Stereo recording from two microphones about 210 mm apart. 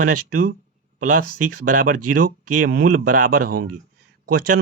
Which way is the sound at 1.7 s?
40° right (ahead or behind).